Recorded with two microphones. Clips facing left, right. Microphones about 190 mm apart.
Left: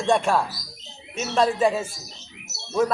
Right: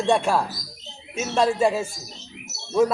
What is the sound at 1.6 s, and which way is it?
Speech, 5° right (ahead or behind).